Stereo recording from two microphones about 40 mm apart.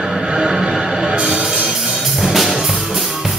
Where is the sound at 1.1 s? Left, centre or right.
Right.